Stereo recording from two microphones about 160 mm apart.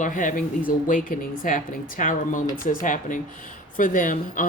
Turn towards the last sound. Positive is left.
turn(degrees=55)  # may be behind; listen again after turning